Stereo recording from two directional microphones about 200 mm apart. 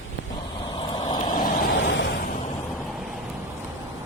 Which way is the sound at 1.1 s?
20° left (ahead or behind).